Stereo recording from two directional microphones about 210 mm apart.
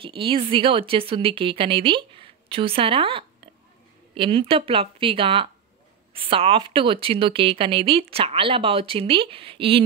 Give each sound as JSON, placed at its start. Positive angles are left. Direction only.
{"t": 0.0, "sound": "speech", "side_deg": -25}